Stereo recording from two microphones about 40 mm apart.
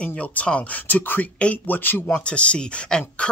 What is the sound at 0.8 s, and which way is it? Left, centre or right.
Speech, left.